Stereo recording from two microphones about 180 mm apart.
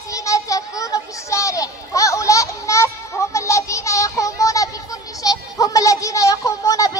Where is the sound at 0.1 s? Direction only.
20° left (ahead or behind).